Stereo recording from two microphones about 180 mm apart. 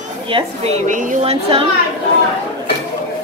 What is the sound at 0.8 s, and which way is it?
Speech, 45° right (ahead or behind).